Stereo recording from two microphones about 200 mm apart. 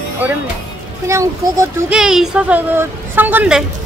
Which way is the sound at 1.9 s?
5° right (ahead or behind).